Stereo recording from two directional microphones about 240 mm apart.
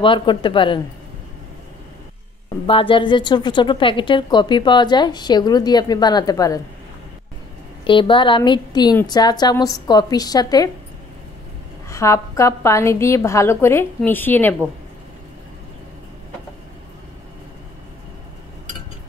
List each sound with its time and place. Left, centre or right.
0.0 s speech: left
2.6 s a woman's voice: left
7.8 s a woman's voice: left
11.9 s a woman's voice: centre